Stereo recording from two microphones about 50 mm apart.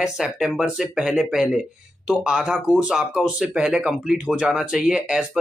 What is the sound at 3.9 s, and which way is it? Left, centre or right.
Speech, centre.